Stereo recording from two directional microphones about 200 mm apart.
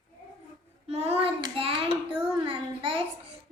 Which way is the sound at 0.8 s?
30° right (ahead or behind).